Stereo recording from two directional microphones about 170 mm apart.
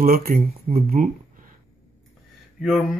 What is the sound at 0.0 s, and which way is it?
Speech, 60° right (ahead or behind).